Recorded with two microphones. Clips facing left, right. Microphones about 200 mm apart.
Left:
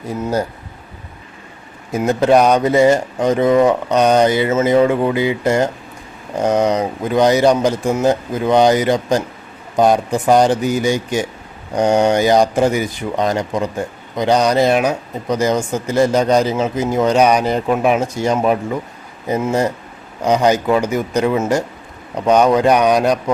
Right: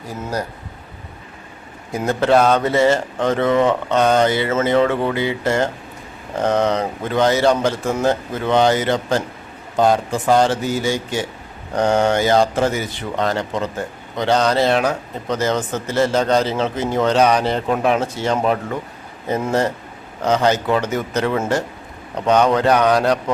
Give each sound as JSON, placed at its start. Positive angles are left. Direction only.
{"t": 0.1, "sound": "speech", "side_deg": 25}
{"t": 1.9, "sound": "speech", "side_deg": 15}